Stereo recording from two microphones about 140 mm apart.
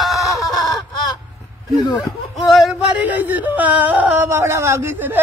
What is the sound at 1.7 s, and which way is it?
Speech, 30° left (ahead or behind).